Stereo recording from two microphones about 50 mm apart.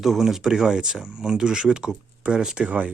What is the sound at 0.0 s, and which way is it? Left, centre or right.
Speech, centre.